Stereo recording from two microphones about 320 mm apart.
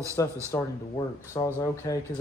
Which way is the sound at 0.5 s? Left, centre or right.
Centre.